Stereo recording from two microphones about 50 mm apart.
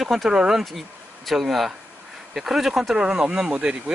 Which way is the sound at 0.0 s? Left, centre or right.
Centre.